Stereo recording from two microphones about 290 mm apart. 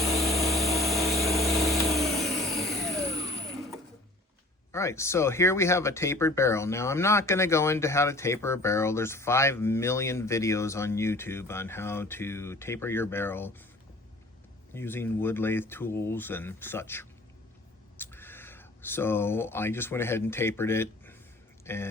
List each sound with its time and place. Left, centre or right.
0.2 s vehicle: centre
4.7 s speech: centre
14.7 s speech: centre